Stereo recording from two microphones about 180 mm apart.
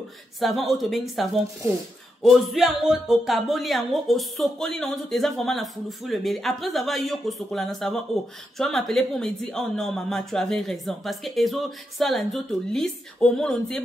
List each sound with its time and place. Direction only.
0.4 s speech: centre (ahead or behind)